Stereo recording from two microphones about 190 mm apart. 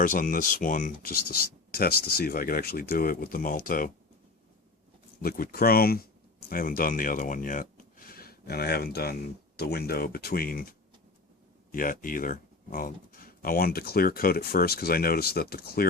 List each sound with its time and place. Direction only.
0.0 s speech: 45° left (ahead or behind)
5.2 s speech: 50° left (ahead or behind)